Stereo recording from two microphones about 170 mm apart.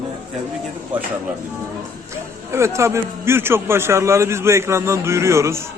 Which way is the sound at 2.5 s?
15° right (ahead or behind).